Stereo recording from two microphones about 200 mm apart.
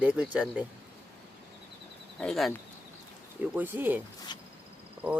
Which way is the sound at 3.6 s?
10° right (ahead or behind).